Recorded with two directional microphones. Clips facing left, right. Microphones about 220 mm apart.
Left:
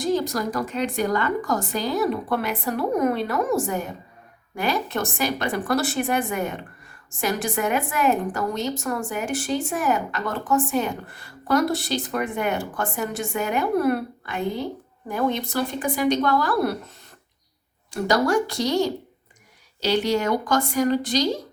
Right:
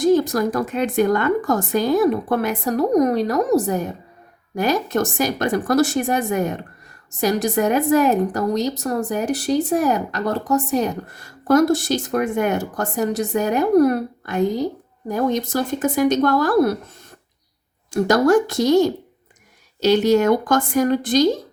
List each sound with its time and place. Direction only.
0.0 s a woman's voice: 50° right (ahead or behind)
17.9 s a woman's voice: 45° right (ahead or behind)
19.8 s a woman's voice: 45° right (ahead or behind)